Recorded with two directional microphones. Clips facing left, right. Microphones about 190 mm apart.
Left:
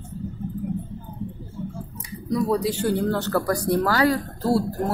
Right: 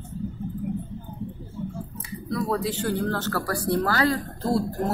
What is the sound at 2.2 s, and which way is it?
Speech, 15° left (ahead or behind).